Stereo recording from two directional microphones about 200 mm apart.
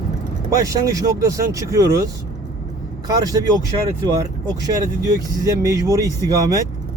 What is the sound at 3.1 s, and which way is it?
Speech, 20° right (ahead or behind).